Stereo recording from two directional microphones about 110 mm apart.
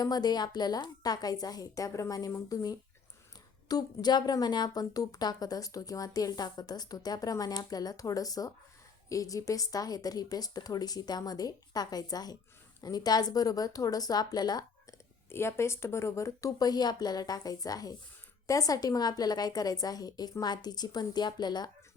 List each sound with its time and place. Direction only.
0.0 s speech: 40° left (ahead or behind)
15.3 s speech: 25° left (ahead or behind); by 21.7 s 40° left (ahead or behind)